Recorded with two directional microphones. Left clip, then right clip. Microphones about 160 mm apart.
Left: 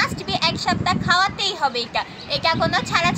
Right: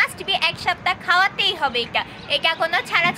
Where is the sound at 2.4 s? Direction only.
10° right (ahead or behind).